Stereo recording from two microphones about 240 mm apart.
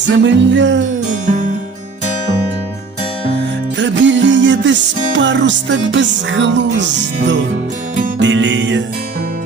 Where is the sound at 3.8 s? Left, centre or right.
Right.